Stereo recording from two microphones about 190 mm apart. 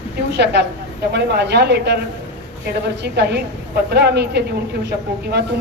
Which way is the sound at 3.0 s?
60° right (ahead or behind).